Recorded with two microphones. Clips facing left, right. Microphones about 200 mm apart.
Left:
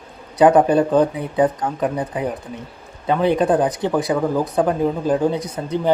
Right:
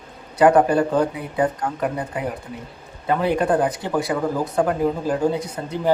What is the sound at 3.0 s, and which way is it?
Speech, 20° left (ahead or behind).